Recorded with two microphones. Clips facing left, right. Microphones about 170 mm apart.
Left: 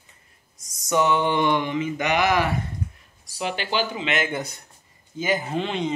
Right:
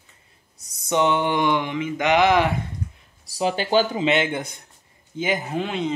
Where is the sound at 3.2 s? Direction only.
35° right (ahead or behind).